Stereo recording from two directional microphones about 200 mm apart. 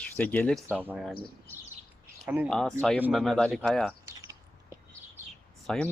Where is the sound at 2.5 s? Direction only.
5° left (ahead or behind).